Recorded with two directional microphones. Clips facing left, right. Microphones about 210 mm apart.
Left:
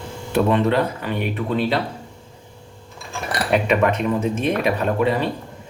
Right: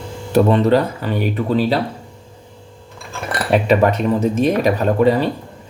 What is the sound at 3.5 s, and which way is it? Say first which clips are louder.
Speech: right 4 dB; 35° right (ahead or behind).